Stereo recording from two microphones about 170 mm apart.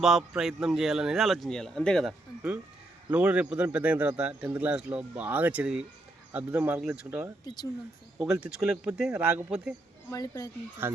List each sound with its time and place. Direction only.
0.0 s a man's voice: centre (ahead or behind)
3.1 s speech: 10° right (ahead or behind)
7.4 s speech: 25° left (ahead or behind)
8.2 s a man's voice: 5° right (ahead or behind)
10.1 s speech: 20° left (ahead or behind)
10.8 s speech: 15° right (ahead or behind)